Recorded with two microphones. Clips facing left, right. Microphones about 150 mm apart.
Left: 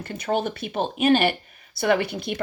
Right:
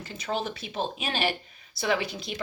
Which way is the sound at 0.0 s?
55° left (ahead or behind).